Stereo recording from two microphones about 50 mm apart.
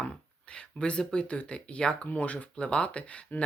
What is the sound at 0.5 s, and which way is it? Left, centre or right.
Speech, left.